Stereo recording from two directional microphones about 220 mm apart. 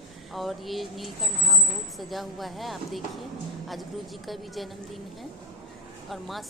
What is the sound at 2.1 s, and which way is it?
Speech, centre (ahead or behind).